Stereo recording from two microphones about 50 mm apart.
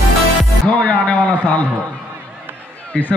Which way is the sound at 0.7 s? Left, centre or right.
Left.